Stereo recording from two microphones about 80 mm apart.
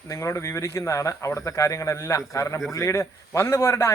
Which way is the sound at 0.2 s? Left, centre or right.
Left.